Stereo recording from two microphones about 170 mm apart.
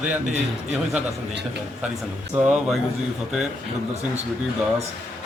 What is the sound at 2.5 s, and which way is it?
Speech, 5° right (ahead or behind).